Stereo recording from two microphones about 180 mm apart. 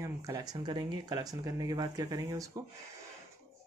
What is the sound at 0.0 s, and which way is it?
Speech, 20° right (ahead or behind).